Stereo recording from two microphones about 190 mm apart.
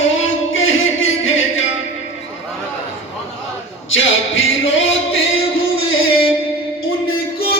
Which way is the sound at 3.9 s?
90° left.